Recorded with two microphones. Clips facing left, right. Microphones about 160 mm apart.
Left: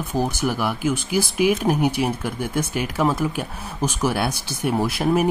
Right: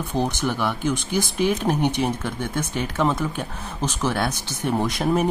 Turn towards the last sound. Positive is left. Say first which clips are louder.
# left 1 dB
turn(degrees=5)  # may be behind; listen again after turning